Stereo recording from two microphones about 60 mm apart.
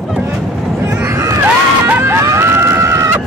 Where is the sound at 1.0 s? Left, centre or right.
Right.